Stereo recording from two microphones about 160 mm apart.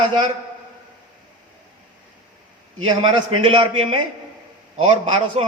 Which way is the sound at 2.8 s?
30° right (ahead or behind).